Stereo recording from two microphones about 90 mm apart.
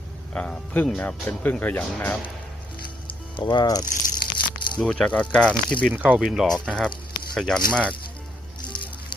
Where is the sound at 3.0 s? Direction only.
60° left (ahead or behind).